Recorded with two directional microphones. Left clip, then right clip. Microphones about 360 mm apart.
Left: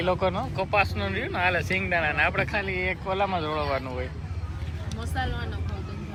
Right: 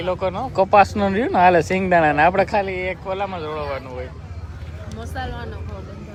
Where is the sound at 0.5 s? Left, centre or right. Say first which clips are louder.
Right 11 dB; right; by 4.0 s centre.